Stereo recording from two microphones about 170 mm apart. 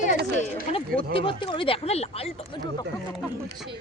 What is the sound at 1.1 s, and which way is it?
Speech, 30° left (ahead or behind).